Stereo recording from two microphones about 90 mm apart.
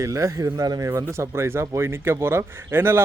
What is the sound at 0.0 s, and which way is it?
A man's voice, 35° right (ahead or behind).